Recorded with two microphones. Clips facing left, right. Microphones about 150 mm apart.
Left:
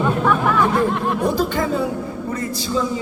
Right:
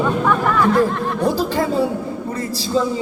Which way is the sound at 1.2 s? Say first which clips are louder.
Right 3 dB; 35° right (ahead or behind).